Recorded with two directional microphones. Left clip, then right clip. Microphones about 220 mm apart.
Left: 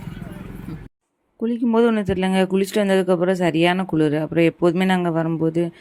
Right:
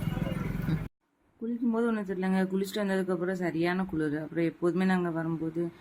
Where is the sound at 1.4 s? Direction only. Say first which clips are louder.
Left 12 dB; 35° left (ahead or behind).